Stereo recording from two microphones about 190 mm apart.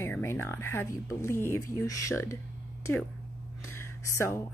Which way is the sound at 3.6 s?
15° left (ahead or behind).